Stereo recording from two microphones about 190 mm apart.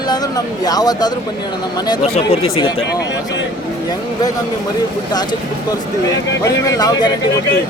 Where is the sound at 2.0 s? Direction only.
35° left (ahead or behind).